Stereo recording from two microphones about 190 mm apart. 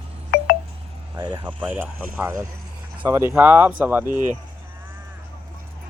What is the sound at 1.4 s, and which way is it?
Speech, 10° right (ahead or behind).